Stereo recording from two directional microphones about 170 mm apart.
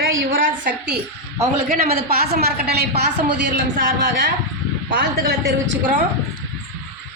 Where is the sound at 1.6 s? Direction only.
60° right (ahead or behind).